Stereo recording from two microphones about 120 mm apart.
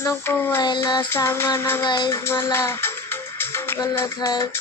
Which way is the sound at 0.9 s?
20° left (ahead or behind).